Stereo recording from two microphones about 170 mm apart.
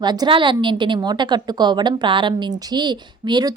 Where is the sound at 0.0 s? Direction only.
25° right (ahead or behind).